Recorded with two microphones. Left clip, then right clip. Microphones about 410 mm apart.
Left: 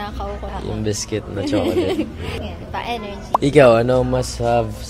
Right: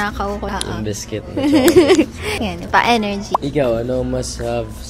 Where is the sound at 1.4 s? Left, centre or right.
Right.